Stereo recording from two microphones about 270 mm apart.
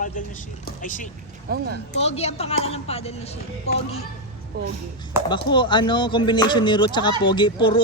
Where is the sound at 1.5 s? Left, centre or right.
Right.